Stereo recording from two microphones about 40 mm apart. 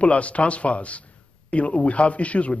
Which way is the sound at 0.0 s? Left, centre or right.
Left.